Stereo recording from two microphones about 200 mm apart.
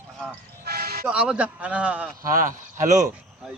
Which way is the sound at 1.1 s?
5° right (ahead or behind).